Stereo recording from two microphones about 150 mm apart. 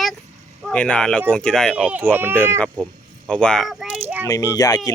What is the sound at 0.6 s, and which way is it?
Speech, 10° left (ahead or behind).